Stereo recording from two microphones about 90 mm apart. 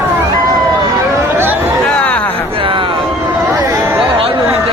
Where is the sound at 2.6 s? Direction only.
70° right (ahead or behind).